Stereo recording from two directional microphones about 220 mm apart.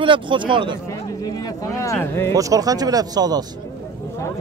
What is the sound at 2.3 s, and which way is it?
Speech, 15° right (ahead or behind).